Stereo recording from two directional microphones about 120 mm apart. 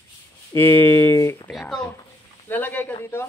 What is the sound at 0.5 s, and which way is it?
Speech, 20° left (ahead or behind).